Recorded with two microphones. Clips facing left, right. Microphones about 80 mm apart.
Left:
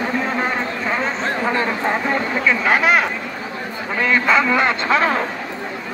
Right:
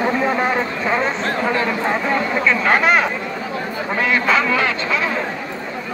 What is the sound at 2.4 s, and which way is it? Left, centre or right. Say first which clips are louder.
Speech: even; centre.